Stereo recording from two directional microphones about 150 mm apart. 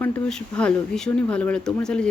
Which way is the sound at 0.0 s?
5° left (ahead or behind).